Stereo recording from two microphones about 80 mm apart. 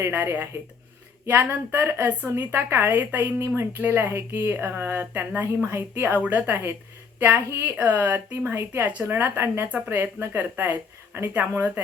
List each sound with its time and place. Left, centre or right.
0.1 s a woman's voice: right
2.3 s a woman's voice: right